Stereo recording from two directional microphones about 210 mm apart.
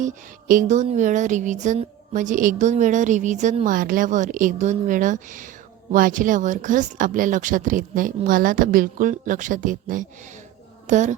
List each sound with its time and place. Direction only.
0.0 s speech: 40° right (ahead or behind)